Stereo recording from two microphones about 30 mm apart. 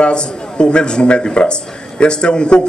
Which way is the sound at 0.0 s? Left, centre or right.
Left.